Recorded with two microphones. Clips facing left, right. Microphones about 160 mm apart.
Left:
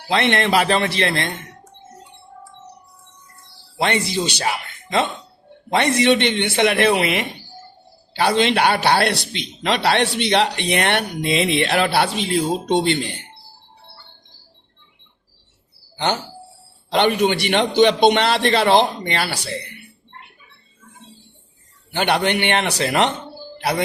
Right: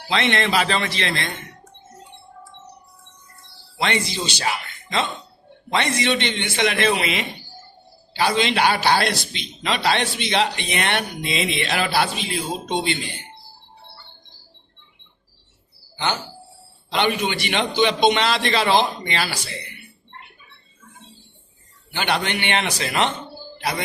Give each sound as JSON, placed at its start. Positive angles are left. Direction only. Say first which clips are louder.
{"t": 0.1, "sound": "a man's voice", "louder": "left 3 dB", "side_deg": 60}
{"t": 3.8, "sound": "a man's voice", "louder": "left 3 dB", "side_deg": 55}
{"t": 16.9, "sound": "a man's voice", "louder": "left 5 dB", "side_deg": 55}
{"t": 21.9, "sound": "a man's voice", "louder": "left 5 dB", "side_deg": 60}